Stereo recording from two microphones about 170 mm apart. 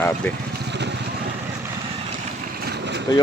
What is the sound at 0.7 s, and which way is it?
Vehicle, 90° right.